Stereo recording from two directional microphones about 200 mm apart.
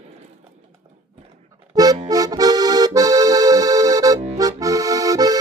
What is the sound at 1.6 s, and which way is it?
Music, 20° right (ahead or behind).